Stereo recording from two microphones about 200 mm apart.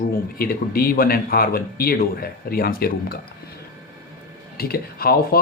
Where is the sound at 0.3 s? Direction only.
50° left (ahead or behind).